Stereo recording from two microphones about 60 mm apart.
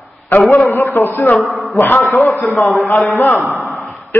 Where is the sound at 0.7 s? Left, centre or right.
Left.